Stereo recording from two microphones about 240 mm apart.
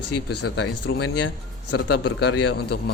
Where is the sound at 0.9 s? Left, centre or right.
Left.